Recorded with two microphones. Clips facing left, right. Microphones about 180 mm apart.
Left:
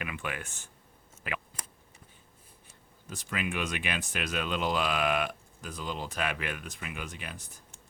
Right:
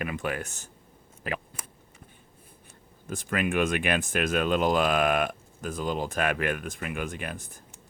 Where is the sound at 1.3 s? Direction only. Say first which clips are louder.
Right 4 dB; 40° right (ahead or behind).